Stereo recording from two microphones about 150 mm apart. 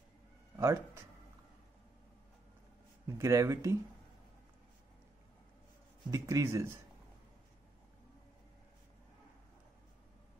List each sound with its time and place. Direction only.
0.6 s speech: 20° right (ahead or behind)
3.2 s speech: 20° right (ahead or behind)
6.0 s speech: 25° right (ahead or behind)